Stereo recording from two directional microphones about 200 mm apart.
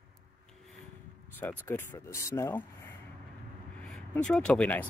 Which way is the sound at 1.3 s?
10° left (ahead or behind).